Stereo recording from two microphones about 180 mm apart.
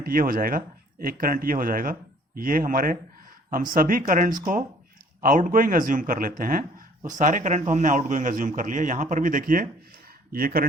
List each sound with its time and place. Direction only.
0.0 s speech: 55° right (ahead or behind)